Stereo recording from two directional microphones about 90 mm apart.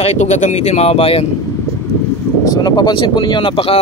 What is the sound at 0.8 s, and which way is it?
Speech, 90° left.